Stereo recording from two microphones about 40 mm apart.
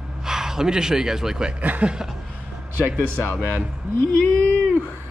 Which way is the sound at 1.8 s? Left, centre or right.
Right.